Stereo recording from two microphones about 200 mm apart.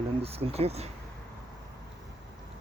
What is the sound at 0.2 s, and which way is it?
Speech, 30° right (ahead or behind).